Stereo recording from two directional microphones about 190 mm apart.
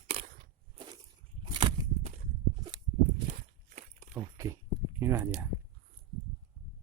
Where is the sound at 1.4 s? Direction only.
30° right (ahead or behind).